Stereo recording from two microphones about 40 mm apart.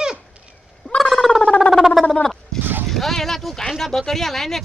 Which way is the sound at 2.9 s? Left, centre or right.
Centre.